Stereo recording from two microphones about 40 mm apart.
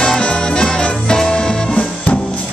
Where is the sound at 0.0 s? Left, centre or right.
Left.